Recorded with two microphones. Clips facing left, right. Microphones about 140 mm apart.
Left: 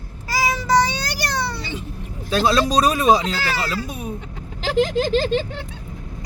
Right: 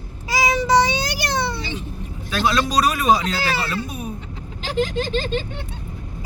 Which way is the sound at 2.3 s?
35° left (ahead or behind).